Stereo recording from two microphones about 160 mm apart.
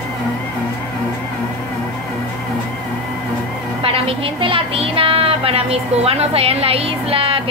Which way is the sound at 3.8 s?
35° right (ahead or behind).